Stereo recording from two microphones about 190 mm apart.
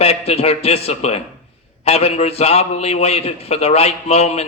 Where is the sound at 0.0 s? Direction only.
35° left (ahead or behind).